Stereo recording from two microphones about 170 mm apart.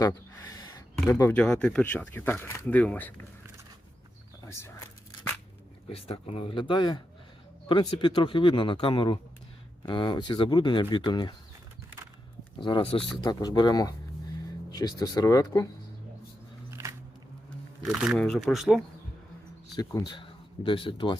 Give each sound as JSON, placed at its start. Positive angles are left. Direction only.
{"t": 0.0, "sound": "gasp", "side_deg": 25}
{"t": 1.0, "sound": "speech", "side_deg": 10}
{"t": 5.9, "sound": "speech", "side_deg": 35}
{"t": 12.5, "sound": "speech", "side_deg": 30}
{"t": 13.2, "sound": "speech", "side_deg": 25}
{"t": 16.8, "sound": "a sound", "side_deg": -15}
{"t": 17.8, "sound": "speech", "side_deg": -5}
{"t": 19.7, "sound": "speech", "side_deg": 20}